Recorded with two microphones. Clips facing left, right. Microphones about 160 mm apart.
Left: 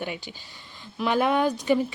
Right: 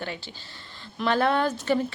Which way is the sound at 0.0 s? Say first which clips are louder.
Left 2 dB; 15° left (ahead or behind).